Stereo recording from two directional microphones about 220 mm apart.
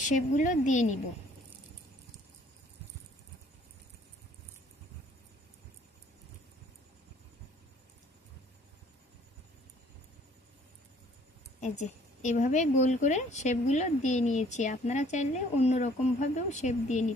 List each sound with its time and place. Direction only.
0.0 s a woman's voice: 35° left (ahead or behind)
11.8 s a woman's voice: 30° left (ahead or behind)